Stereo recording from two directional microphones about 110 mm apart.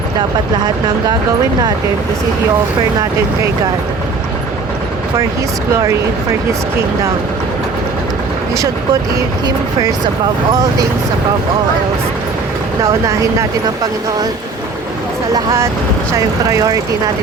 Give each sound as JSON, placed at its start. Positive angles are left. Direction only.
{"t": 8.5, "sound": "speech", "side_deg": -30}
{"t": 10.5, "sound": "speech", "side_deg": -35}
{"t": 16.1, "sound": "speech", "side_deg": -30}